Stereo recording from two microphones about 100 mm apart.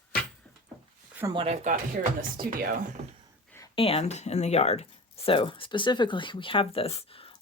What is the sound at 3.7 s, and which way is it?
Speech, 70° left (ahead or behind).